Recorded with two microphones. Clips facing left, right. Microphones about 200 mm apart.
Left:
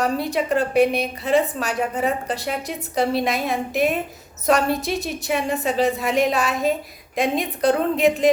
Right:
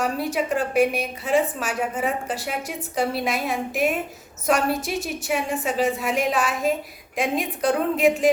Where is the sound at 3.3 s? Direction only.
35° left (ahead or behind).